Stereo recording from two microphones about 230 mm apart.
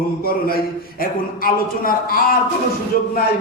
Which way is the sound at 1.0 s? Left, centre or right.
Left.